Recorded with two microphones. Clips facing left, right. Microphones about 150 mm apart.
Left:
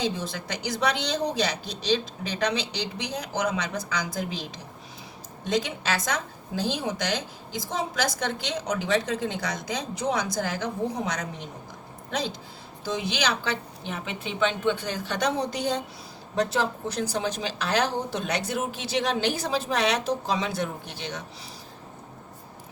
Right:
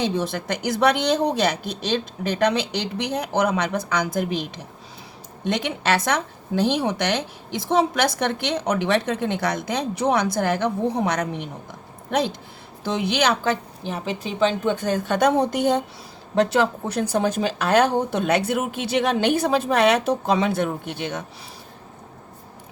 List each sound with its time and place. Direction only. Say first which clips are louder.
0.0 s a woman's voice: right 6 dB; 60° right (ahead or behind)
16.3 s speech: right 6 dB; 65° right (ahead or behind)